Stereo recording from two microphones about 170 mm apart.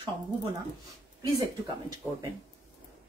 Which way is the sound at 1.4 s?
25° right (ahead or behind).